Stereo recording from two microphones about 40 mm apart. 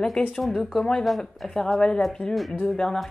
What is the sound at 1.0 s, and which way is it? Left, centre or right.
Speech, centre.